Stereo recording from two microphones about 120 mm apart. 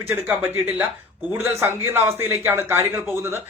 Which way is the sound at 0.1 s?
15° right (ahead or behind).